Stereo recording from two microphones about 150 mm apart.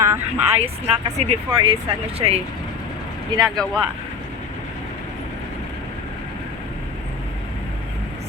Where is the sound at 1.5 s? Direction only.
35° right (ahead or behind).